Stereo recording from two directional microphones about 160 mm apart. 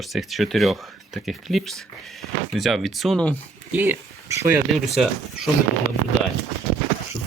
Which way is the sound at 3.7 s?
15° right (ahead or behind).